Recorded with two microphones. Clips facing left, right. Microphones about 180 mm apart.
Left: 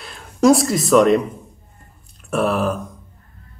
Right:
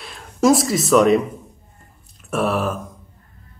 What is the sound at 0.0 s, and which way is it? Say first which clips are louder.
Speech: left 2 dB; centre (ahead or behind).